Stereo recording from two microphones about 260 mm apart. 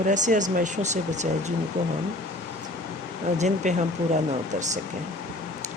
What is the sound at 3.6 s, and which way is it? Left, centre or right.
Speech, right.